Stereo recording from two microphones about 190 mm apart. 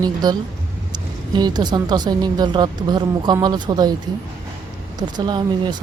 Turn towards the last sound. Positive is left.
turn(degrees=-25)  # may be behind; listen again after turning